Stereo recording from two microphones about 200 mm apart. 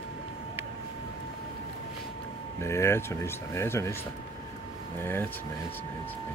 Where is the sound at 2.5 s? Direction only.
15° left (ahead or behind).